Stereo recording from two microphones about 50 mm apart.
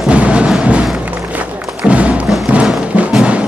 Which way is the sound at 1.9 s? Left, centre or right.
Right.